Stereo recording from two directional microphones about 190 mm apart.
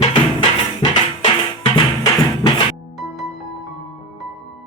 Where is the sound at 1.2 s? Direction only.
25° left (ahead or behind).